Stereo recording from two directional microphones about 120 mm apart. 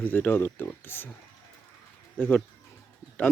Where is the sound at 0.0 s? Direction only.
15° left (ahead or behind).